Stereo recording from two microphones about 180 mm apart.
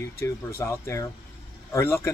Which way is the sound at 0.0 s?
15° left (ahead or behind).